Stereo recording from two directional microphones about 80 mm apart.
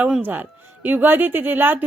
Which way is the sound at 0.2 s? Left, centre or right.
Right.